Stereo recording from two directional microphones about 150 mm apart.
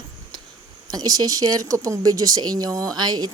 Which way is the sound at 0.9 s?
25° right (ahead or behind).